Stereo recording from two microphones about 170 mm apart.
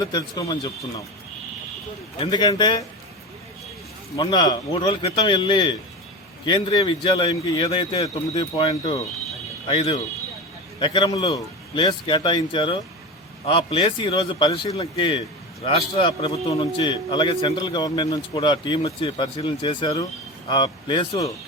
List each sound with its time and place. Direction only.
0.0 s a man's voice: 20° left (ahead or behind)
2.1 s a man's voice: 30° left (ahead or behind)
4.2 s a man's voice: 25° left (ahead or behind)